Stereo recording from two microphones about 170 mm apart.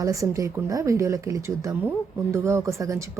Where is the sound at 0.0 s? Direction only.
20° right (ahead or behind).